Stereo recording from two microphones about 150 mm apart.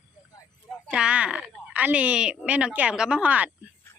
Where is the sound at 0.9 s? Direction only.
5° right (ahead or behind).